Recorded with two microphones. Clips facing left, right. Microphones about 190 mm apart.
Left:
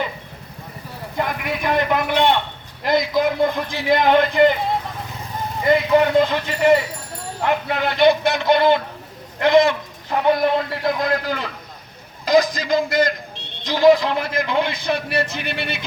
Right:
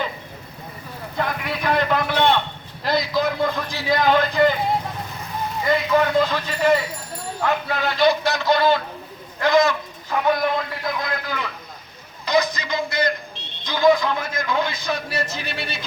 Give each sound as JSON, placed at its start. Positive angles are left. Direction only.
{"t": 1.1, "sound": "a sound", "side_deg": 15}
{"t": 3.8, "sound": "a man's voice", "side_deg": 20}
{"t": 5.6, "sound": "a man's voice", "side_deg": 20}
{"t": 12.4, "sound": "a man's voice", "side_deg": 90}
{"t": 13.0, "sound": "a man's voice", "side_deg": 40}
{"t": 14.7, "sound": "a man's voice", "side_deg": 60}